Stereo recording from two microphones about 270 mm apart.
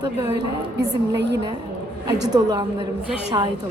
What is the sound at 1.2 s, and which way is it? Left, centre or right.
Speech, right.